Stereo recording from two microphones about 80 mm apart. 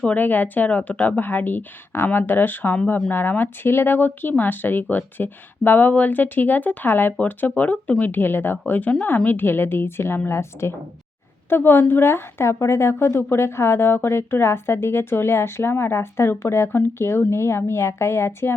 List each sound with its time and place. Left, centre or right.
0.0 s speech: centre